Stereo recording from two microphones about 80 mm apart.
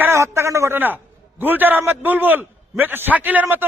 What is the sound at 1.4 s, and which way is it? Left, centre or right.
A man's voice, right.